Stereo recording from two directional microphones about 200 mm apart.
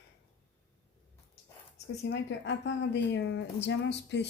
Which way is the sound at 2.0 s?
65° left (ahead or behind).